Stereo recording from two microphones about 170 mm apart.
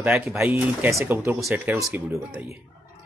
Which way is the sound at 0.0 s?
10° right (ahead or behind).